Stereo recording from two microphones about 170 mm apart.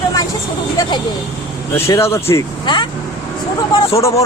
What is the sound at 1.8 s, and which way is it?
Speech, 15° left (ahead or behind).